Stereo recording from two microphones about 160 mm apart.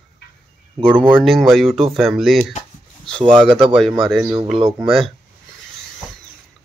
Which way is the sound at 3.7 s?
Centre (ahead or behind).